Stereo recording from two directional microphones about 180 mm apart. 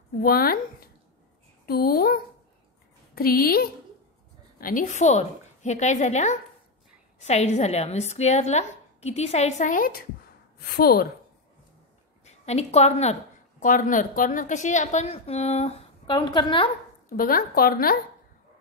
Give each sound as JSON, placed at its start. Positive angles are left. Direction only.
{"t": 0.2, "sound": "a woman's voice", "side_deg": 55}
{"t": 3.2, "sound": "a woman's voice", "side_deg": 55}
{"t": 12.3, "sound": "a woman's voice", "side_deg": 35}
{"t": 16.2, "sound": "a woman's voice", "side_deg": 25}
{"t": 17.2, "sound": "a woman's voice", "side_deg": 55}